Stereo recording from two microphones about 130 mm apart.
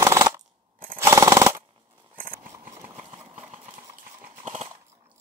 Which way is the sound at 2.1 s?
90° right.